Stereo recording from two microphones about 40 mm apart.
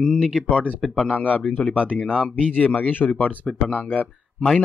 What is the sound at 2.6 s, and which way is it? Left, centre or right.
Speech, left.